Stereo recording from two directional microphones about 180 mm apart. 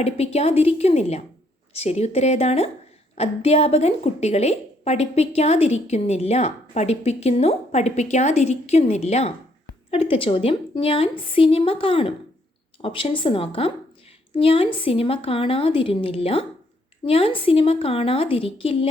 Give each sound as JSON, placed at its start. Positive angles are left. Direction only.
{"t": 0.0, "sound": "a woman's voice", "side_deg": 35}